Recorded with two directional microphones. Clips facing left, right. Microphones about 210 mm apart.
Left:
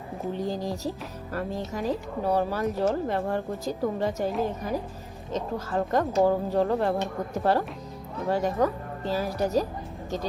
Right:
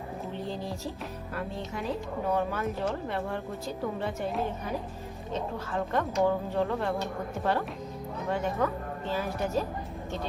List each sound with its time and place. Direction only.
0.3 s speech: 40° left (ahead or behind)
5.3 s speech: 40° left (ahead or behind)